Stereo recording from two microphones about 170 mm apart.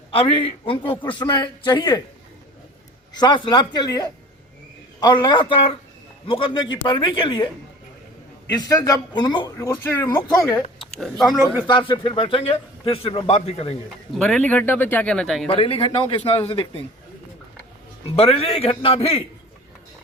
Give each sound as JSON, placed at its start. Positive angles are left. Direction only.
{"t": 0.1, "sound": "a man's voice", "side_deg": 30}
{"t": 3.1, "sound": "a man's voice", "side_deg": 25}
{"t": 11.0, "sound": "speech", "side_deg": 0}
{"t": 11.6, "sound": "a man's voice", "side_deg": 30}
{"t": 14.1, "sound": "a man's voice", "side_deg": 5}
{"t": 15.4, "sound": "a man's voice", "side_deg": 35}
{"t": 18.0, "sound": "a man's voice", "side_deg": 35}